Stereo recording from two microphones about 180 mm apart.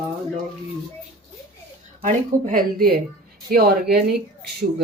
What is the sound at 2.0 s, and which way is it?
Speech, 50° right (ahead or behind).